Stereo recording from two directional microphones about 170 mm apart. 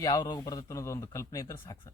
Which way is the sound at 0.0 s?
20° left (ahead or behind).